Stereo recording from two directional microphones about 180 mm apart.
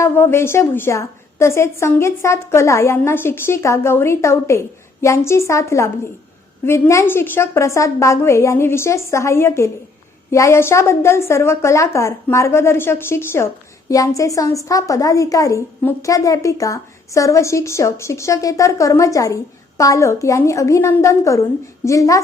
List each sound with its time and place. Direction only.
0.0 s a woman's voice: 15° left (ahead or behind)